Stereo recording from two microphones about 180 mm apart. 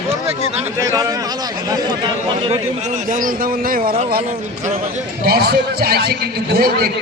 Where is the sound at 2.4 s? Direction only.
40° right (ahead or behind); by 3.9 s 55° right (ahead or behind).